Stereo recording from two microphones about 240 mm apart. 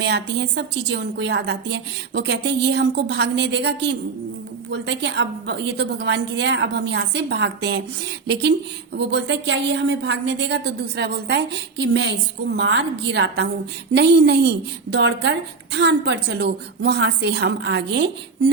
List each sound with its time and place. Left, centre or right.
0.0 s a woman's voice: right